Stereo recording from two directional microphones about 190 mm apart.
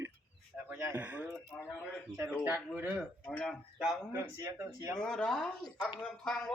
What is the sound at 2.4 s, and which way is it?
Speech, 10° right (ahead or behind).